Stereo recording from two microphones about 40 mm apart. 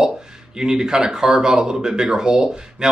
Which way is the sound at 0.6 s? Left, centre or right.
Centre.